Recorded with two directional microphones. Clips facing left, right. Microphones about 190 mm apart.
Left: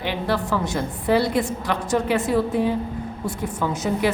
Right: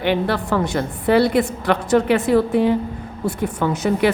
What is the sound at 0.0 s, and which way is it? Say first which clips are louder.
A woman's voice: right 4 dB; 60° right (ahead or behind).